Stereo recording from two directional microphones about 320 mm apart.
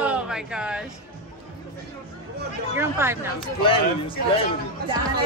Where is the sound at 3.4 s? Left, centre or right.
Centre.